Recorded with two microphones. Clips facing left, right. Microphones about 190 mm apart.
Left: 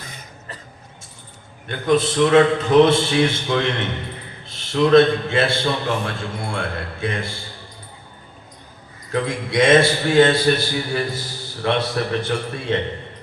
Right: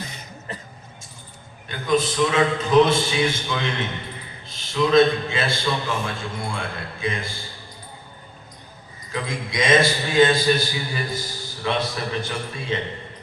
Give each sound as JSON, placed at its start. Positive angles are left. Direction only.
{"t": 0.0, "sound": "cough", "side_deg": 50}
{"t": 1.6, "sound": "a man's voice", "side_deg": 65}
{"t": 9.1, "sound": "a man's voice", "side_deg": 65}
{"t": 11.6, "sound": "a man's voice", "side_deg": 65}